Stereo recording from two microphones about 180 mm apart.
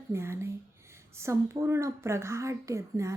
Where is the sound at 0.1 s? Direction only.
15° right (ahead or behind).